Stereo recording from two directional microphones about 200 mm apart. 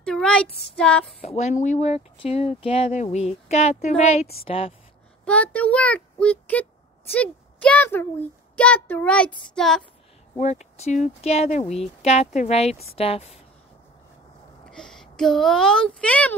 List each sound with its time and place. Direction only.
0.0 s speech: 5° left (ahead or behind)
1.2 s a woman's voice: 35° left (ahead or behind)
5.2 s a child's voice: 5° left (ahead or behind)
10.3 s a woman's voice: 35° left (ahead or behind)
14.7 s a child's voice: 5° left (ahead or behind)